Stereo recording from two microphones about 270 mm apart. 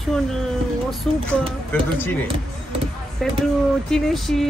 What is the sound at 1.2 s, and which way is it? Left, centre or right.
Speech, centre.